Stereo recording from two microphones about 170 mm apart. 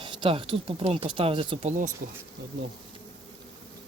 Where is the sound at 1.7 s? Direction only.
50° right (ahead or behind).